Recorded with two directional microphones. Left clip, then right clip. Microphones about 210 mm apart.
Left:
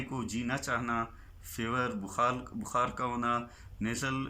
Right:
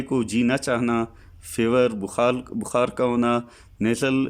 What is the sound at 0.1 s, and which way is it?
A man's voice, 45° right (ahead or behind).